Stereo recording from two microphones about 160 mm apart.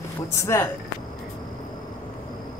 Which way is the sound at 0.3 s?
15° left (ahead or behind).